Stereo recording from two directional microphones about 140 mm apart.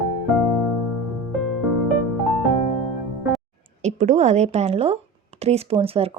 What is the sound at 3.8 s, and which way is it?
A woman's voice, 55° right (ahead or behind).